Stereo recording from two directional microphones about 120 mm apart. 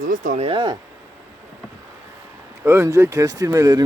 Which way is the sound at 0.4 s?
40° right (ahead or behind).